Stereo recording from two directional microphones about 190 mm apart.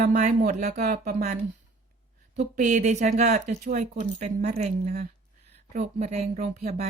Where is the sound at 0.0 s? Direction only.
40° right (ahead or behind).